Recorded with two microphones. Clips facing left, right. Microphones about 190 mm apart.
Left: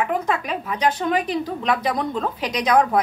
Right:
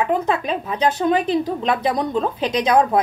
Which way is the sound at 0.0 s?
25° right (ahead or behind).